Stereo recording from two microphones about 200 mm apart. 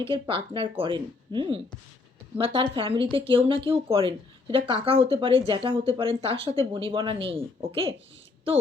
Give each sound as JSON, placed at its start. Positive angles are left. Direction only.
{"t": 0.5, "sound": "speech", "side_deg": -25}